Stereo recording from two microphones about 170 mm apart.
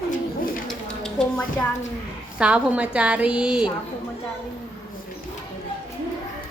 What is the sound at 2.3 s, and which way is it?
A woman's voice, 5° right (ahead or behind).